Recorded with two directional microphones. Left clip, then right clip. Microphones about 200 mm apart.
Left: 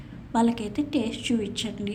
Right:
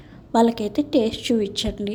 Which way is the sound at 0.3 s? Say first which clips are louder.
Right 6 dB; 30° right (ahead or behind).